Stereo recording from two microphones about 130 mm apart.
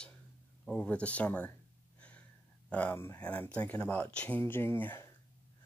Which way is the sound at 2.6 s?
10° left (ahead or behind).